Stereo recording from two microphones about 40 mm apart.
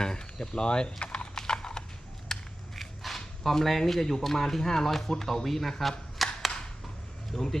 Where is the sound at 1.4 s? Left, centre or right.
Centre.